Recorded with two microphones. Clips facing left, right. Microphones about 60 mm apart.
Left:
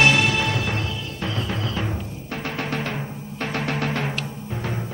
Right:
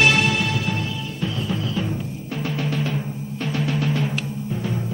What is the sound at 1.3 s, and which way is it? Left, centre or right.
Music, left.